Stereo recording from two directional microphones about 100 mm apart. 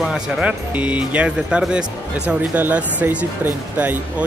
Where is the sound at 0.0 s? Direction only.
10° right (ahead or behind).